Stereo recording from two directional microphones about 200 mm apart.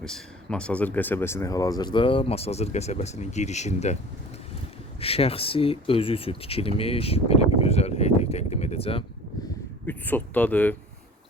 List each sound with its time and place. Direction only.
0.0 s speech: 5° left (ahead or behind); by 3.9 s 35° left (ahead or behind)
4.9 s speech: 30° left (ahead or behind)
9.8 s speech: 10° left (ahead or behind)